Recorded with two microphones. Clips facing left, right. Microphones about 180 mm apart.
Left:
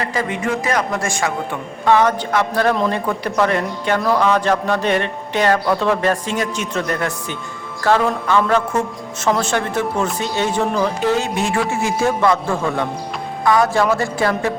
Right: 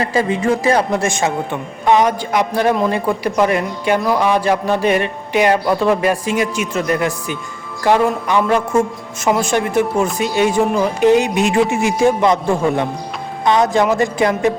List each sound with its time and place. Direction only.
0.0 s speech: 30° right (ahead or behind)